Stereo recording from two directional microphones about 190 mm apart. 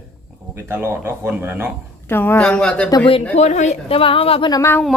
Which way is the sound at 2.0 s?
10° left (ahead or behind).